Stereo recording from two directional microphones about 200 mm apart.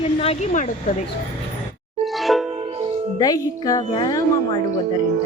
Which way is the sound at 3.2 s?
20° left (ahead or behind).